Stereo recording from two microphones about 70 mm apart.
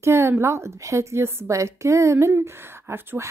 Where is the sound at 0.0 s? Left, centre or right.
Right.